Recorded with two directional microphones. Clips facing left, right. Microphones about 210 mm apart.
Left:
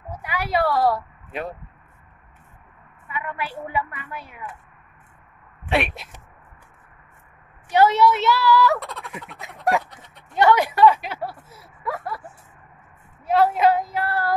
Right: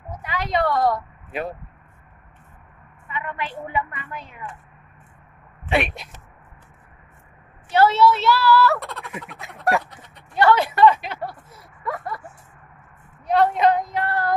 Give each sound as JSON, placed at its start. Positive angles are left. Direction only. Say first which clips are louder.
{"t": 0.1, "sound": "a sound", "louder": "even", "side_deg": 10}
{"t": 1.3, "sound": "a woman's voice", "louder": "right 2 dB", "side_deg": 0}
{"t": 3.1, "sound": "speech", "louder": "even", "side_deg": 10}
{"t": 5.7, "sound": "a woman's voice", "louder": "right 1 dB", "side_deg": 0}
{"t": 7.7, "sound": "speech", "louder": "even", "side_deg": 15}
{"t": 8.7, "sound": "frog", "louder": "right 1 dB", "side_deg": 0}
{"t": 10.3, "sound": "speech", "louder": "even", "side_deg": 15}
{"t": 13.3, "sound": "a woman's voice", "louder": "even", "side_deg": 5}